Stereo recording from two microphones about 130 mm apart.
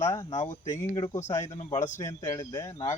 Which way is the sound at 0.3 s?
65° left (ahead or behind).